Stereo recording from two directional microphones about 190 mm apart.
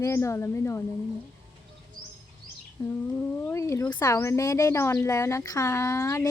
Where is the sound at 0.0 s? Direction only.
15° left (ahead or behind).